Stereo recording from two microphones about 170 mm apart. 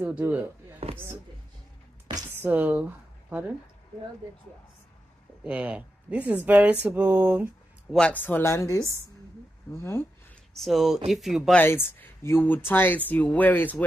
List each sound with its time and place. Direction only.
0.0 s speech: 10° right (ahead or behind)
0.8 s speech: 35° right (ahead or behind)
2.1 s a sound: 25° right (ahead or behind)
2.4 s speech: 10° right (ahead or behind)
5.4 s speech: 10° right (ahead or behind)
7.9 s speech: 5° left (ahead or behind)
10.5 s speech: centre (ahead or behind)
11.6 s speech: 10° left (ahead or behind)